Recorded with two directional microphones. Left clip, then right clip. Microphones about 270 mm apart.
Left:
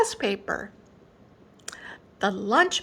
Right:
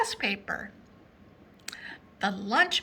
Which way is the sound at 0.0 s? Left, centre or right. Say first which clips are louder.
Left 4 dB; left.